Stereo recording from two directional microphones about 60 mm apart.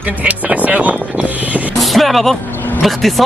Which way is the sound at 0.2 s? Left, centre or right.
Right.